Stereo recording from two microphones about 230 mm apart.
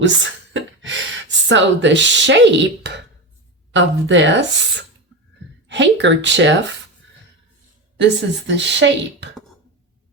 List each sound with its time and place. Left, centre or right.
0.0 s speech: right
7.9 s speech: right